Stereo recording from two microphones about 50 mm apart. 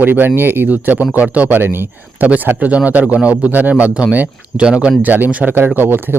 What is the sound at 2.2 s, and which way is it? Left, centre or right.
Speech, right.